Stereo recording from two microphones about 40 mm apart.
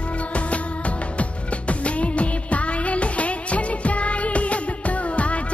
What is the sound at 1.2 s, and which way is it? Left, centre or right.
Music, left.